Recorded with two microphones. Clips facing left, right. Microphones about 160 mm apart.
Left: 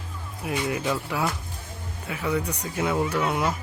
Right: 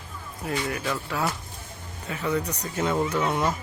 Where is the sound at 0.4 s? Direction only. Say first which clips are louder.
Left 2 dB; 15° left (ahead or behind).